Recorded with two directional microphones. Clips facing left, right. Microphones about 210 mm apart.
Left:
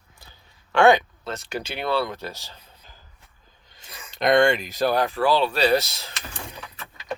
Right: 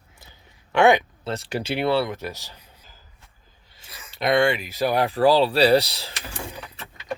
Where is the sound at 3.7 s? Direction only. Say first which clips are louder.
Left 2 dB; 5° right (ahead or behind).